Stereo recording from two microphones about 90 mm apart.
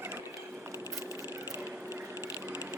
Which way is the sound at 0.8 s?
35° right (ahead or behind).